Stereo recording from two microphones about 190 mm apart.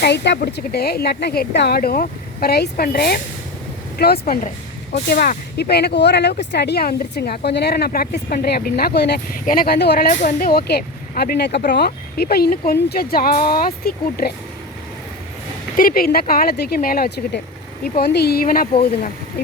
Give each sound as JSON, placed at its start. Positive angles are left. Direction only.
{"t": 0.0, "sound": "a woman's voice", "side_deg": 60}
{"t": 10.1, "sound": "speech", "side_deg": 40}
{"t": 15.7, "sound": "a woman's voice", "side_deg": 45}